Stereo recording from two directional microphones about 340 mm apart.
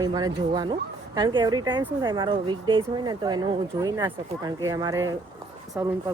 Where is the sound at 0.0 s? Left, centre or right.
Centre.